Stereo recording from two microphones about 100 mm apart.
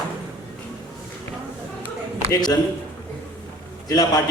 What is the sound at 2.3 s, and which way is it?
Speech, 35° left (ahead or behind).